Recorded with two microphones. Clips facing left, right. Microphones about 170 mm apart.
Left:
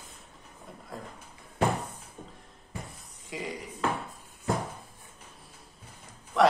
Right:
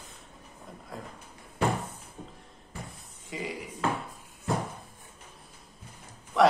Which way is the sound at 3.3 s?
Centre (ahead or behind).